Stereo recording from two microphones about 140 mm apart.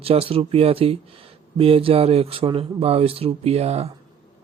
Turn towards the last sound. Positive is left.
turn(degrees=-50)  # may be behind; listen again after turning